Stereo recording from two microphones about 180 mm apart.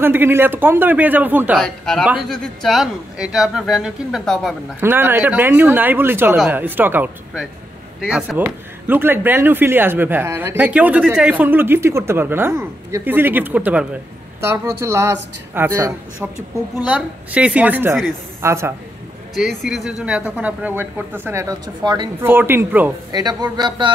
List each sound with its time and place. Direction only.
0.0 s speech: 10° right (ahead or behind)
1.6 s a man's voice: 5° left (ahead or behind)
4.7 s a man's voice: 10° right (ahead or behind)
19.6 s speech: centre (ahead or behind); by 22.1 s 25° right (ahead or behind)
22.2 s speech: 10° right (ahead or behind)
23.1 s speech: 25° right (ahead or behind)